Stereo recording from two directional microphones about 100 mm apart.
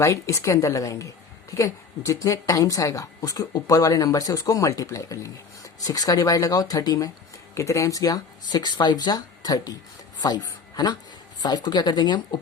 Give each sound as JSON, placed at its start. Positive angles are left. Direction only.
{"t": 0.0, "sound": "a woman's voice", "side_deg": 30}